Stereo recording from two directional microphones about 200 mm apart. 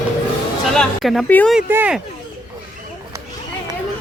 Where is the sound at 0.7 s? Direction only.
Centre (ahead or behind).